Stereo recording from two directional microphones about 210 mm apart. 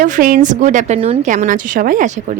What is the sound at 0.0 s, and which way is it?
A woman's voice, 40° right (ahead or behind).